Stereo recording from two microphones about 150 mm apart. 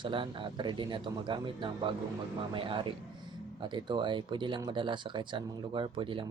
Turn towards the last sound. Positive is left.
turn(degrees=-35)  # may be behind; listen again after turning